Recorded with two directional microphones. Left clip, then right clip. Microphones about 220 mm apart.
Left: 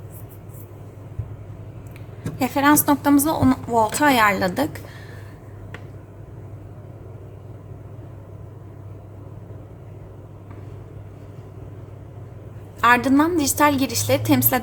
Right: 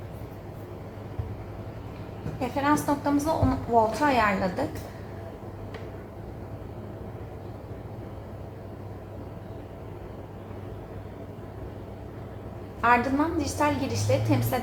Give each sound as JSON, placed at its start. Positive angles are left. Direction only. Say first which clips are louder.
{"t": 2.4, "sound": "a woman's voice", "louder": "left 7 dB", "side_deg": 60}
{"t": 12.8, "sound": "a woman's voice", "louder": "left 6 dB", "side_deg": 60}